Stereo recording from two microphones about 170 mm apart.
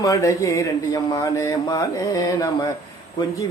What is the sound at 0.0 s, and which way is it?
A man's voice, 20° left (ahead or behind).